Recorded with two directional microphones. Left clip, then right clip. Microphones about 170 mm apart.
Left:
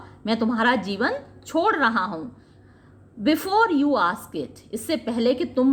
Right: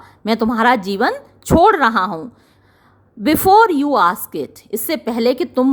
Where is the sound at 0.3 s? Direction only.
45° right (ahead or behind).